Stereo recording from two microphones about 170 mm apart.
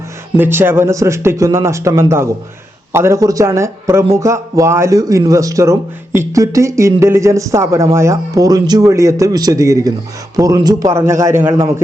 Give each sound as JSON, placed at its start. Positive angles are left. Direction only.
{"t": 0.3, "sound": "speech", "side_deg": -10}